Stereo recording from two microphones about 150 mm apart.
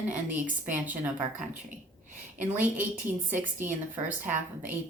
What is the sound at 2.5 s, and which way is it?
A woman's voice, 10° right (ahead or behind).